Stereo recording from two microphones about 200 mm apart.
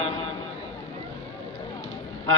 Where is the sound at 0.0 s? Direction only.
90° right.